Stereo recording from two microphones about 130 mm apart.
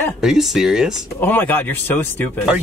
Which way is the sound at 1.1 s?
15° left (ahead or behind).